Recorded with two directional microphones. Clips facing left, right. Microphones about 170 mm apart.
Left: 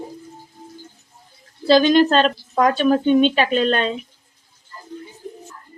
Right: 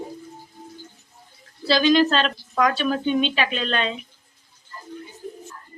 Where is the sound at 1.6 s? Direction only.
45° left (ahead or behind).